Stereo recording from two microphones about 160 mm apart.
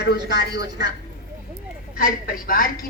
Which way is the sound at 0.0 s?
90° left.